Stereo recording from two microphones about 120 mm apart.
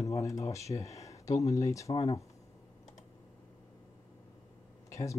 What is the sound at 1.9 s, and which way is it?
Speech, 60° left (ahead or behind).